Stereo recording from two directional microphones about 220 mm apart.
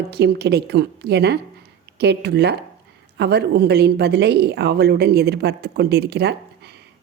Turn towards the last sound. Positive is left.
turn(degrees=-50)  # may be behind; listen again after turning